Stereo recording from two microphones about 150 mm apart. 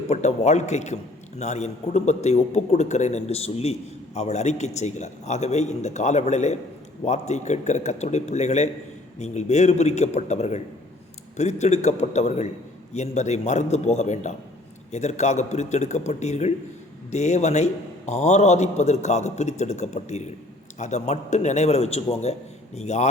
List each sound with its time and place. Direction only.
0.1 s a man's voice: 50° left (ahead or behind)